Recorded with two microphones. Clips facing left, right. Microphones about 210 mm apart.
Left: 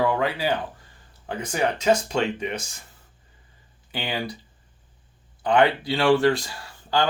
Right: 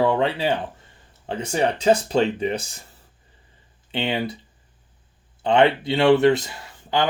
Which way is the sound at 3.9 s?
25° right (ahead or behind).